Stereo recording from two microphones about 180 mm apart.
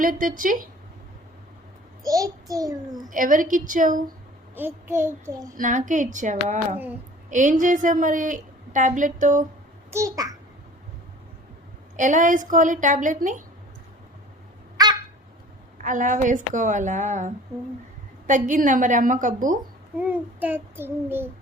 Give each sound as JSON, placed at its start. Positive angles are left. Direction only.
{"t": 0.0, "sound": "a woman's voice", "side_deg": -50}
{"t": 2.0, "sound": "a child's voice", "side_deg": -20}
{"t": 3.1, "sound": "a woman's voice", "side_deg": -50}
{"t": 4.5, "sound": "child singing", "side_deg": -10}
{"t": 5.5, "sound": "a woman's voice", "side_deg": -45}
{"t": 9.9, "sound": "a child's voice", "side_deg": -20}
{"t": 11.9, "sound": "a woman's voice", "side_deg": -45}
{"t": 14.8, "sound": "a sound", "side_deg": -20}
{"t": 15.8, "sound": "a woman's voice", "side_deg": -45}
{"t": 20.0, "sound": "child singing", "side_deg": -10}